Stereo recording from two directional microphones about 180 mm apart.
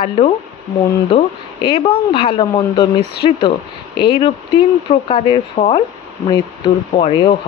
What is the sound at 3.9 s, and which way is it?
A woman's voice, 25° left (ahead or behind).